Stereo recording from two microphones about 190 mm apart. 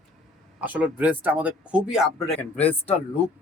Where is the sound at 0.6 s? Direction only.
10° right (ahead or behind).